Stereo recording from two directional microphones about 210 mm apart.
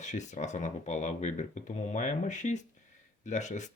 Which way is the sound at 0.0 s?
35° left (ahead or behind).